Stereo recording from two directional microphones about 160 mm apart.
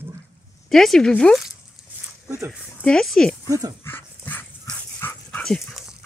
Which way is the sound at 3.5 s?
20° right (ahead or behind).